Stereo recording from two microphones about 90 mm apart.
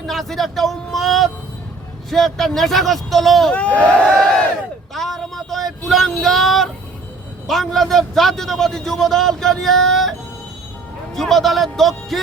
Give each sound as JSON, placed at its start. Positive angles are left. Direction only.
{"t": 0.1, "sound": "a man's voice", "side_deg": 0}
{"t": 3.5, "sound": "a sound", "side_deg": 15}
{"t": 4.9, "sound": "a man's voice", "side_deg": 5}